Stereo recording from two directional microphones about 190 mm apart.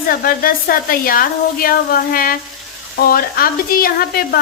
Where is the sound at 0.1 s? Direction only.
50° left (ahead or behind).